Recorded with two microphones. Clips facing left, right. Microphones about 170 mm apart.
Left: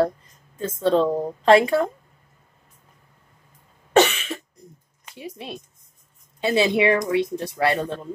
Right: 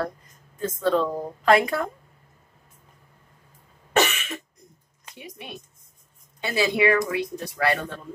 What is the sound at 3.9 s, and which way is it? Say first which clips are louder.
Cough: left 5 dB; 30° left (ahead or behind).